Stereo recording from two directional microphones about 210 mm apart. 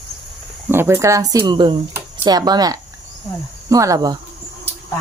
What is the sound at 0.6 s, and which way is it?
A woman's voice, 10° right (ahead or behind).